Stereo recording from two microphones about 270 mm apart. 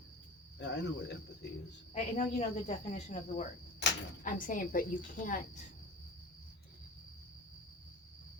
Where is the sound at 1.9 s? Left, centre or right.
Left.